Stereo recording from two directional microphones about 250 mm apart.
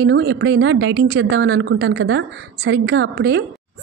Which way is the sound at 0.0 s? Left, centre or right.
Right.